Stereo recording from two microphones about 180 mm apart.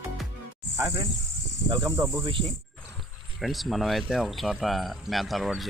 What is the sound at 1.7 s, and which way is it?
Speech, 20° right (ahead or behind).